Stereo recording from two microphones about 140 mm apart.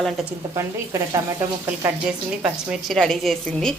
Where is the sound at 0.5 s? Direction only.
20° right (ahead or behind).